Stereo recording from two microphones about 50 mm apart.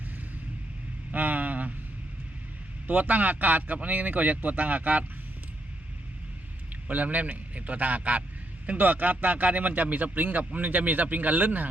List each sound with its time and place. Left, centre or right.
1.1 s vehicle: right
2.8 s a man's voice: right
6.8 s a man's voice: right